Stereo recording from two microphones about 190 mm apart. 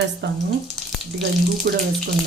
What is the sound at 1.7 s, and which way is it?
Speech, 55° right (ahead or behind).